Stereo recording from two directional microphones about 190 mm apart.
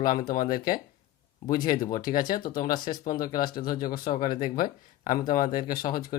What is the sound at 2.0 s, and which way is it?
Speech, 45° left (ahead or behind).